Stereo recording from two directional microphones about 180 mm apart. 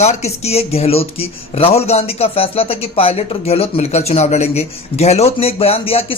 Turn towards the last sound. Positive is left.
turn(degrees=30)  # may be behind; listen again after turning